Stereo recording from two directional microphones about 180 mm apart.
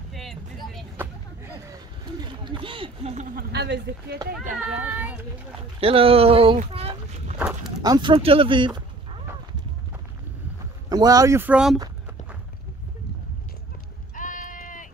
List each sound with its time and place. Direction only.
0.1 s vehicle: centre (ahead or behind)
2.4 s a sound: 30° right (ahead or behind)
3.3 s speech: 65° right (ahead or behind)
4.7 s speech: 10° right (ahead or behind)
5.8 s speech: 30° right (ahead or behind)
7.3 s livestock: 5° right (ahead or behind)
7.8 s speech: 25° right (ahead or behind)
10.9 s speech: 20° right (ahead or behind); by 11.8 s 5° right (ahead or behind)
14.1 s a sound: 45° left (ahead or behind)